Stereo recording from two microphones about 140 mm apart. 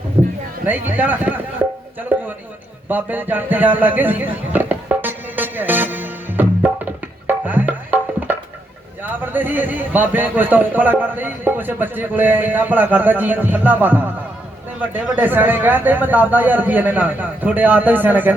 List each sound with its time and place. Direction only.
0.6 s a man's voice: 15° right (ahead or behind)
2.9 s a sound: 15° right (ahead or behind)
7.3 s music: 10° right (ahead or behind)
9.0 s a man's voice: 15° right (ahead or behind)